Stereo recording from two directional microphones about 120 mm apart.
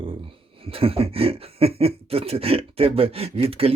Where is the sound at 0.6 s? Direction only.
50° right (ahead or behind).